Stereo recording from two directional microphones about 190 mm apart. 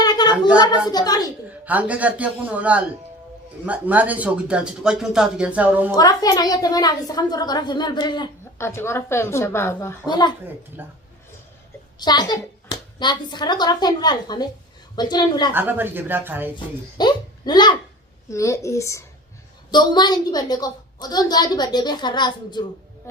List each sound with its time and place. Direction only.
0.0 s a sound: 20° left (ahead or behind)
0.5 s a woman's voice: 20° left (ahead or behind)
1.6 s speech: 5° right (ahead or behind)
5.9 s a woman's voice: 20° left (ahead or behind)
10.1 s a woman's voice: 20° left (ahead or behind)
10.8 s speech: 10° right (ahead or behind)
11.9 s a woman's voice: 20° left (ahead or behind)
15.5 s speech: 10° right (ahead or behind)
17.0 s a child's voice: 20° left (ahead or behind)